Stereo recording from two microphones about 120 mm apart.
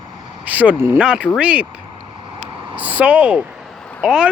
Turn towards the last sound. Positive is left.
turn(degrees=-5)  # may be behind; listen again after turning